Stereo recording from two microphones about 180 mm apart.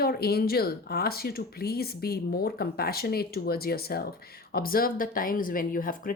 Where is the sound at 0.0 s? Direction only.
60° left (ahead or behind).